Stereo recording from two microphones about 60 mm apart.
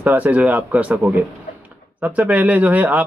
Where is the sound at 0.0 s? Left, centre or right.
Right.